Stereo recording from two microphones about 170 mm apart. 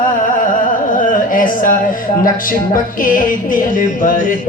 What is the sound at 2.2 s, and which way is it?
Music, 55° left (ahead or behind).